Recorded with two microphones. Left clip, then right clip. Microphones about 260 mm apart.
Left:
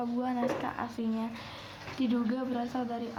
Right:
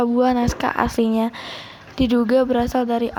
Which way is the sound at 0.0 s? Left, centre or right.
Right.